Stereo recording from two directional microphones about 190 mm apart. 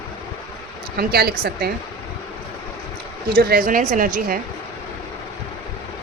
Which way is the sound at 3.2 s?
50° right (ahead or behind).